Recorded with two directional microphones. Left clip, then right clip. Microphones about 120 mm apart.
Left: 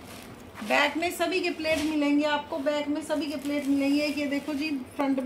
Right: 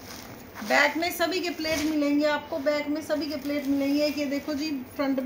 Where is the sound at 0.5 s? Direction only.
Centre (ahead or behind).